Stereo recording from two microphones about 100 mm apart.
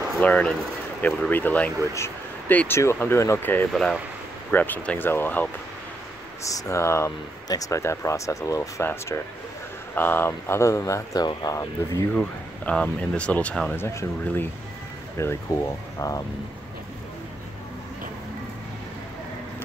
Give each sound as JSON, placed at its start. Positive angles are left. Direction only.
{"t": 0.2, "sound": "speech", "side_deg": 10}
{"t": 3.7, "sound": "speech", "side_deg": 5}
{"t": 4.5, "sound": "speech", "side_deg": 15}
{"t": 6.6, "sound": "speech", "side_deg": 30}
{"t": 12.1, "sound": "speech", "side_deg": 15}